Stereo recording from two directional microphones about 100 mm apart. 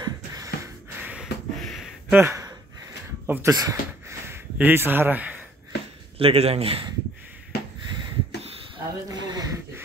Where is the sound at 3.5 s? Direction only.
35° right (ahead or behind); by 5.3 s 15° right (ahead or behind).